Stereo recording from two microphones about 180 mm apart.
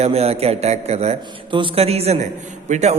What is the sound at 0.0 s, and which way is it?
A man's voice, 35° right (ahead or behind).